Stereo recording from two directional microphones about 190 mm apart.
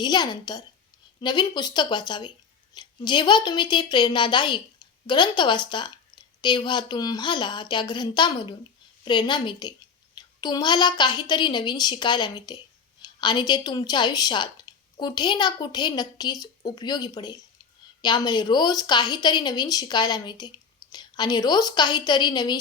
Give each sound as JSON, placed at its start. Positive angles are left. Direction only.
{"t": 0.0, "sound": "a woman's voice", "side_deg": 20}